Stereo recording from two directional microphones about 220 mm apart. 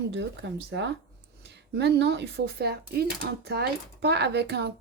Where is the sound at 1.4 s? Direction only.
50° right (ahead or behind).